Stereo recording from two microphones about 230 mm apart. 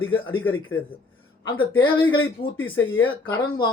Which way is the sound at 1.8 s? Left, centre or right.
Centre.